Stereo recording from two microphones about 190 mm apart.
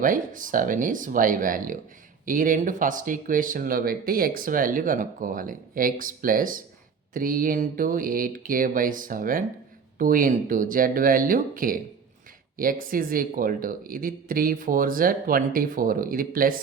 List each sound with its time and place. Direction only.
0.0 s speech: 45° right (ahead or behind)